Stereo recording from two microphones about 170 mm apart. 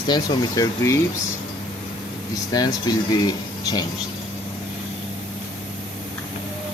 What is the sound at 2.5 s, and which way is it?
Speech, 25° left (ahead or behind).